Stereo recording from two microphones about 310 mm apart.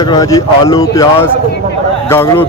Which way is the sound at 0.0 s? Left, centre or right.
Centre.